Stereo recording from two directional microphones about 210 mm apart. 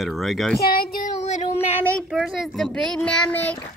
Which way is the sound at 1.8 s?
Centre (ahead or behind).